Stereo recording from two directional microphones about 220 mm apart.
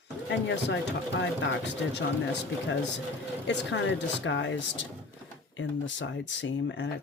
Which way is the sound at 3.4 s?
55° left (ahead or behind).